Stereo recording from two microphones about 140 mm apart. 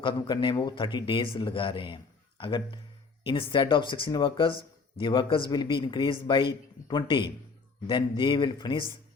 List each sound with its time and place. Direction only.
0.0 s speech: 35° left (ahead or behind)